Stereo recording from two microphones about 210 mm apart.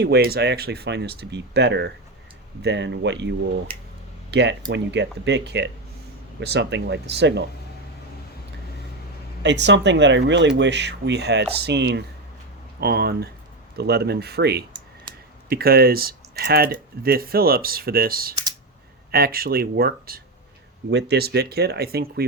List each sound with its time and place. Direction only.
0.0 s speech: 50° right (ahead or behind)
9.4 s speech: 55° right (ahead or behind)